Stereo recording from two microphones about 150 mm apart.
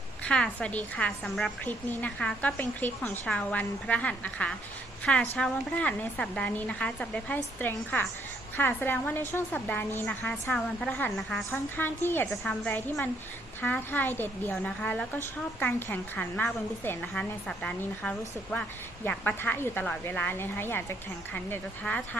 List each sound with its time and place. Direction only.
0.3 s a woman's voice: 5° left (ahead or behind)
11.5 s a woman's voice: 15° left (ahead or behind)
12.3 s a woman's voice: 5° left (ahead or behind)
12.7 s a woman's voice: 15° left (ahead or behind)